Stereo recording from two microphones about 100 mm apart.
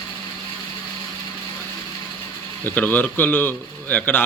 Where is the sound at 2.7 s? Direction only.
20° left (ahead or behind).